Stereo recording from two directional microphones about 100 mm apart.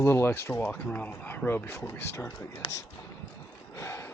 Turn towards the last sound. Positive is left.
turn(degrees=30)  # may be behind; listen again after turning